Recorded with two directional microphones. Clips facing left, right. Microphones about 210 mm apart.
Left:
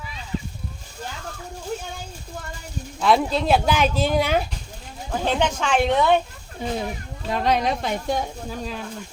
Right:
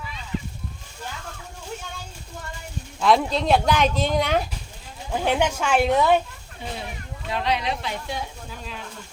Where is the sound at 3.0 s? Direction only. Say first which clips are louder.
Even; 5° left (ahead or behind).